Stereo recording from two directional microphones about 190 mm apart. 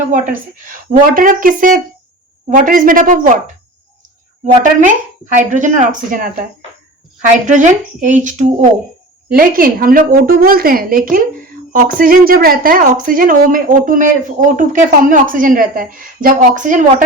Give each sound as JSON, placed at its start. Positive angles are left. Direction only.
{"t": 0.1, "sound": "a woman's voice", "side_deg": -45}
{"t": 4.8, "sound": "a woman's voice", "side_deg": -40}
{"t": 7.4, "sound": "a woman's voice", "side_deg": -40}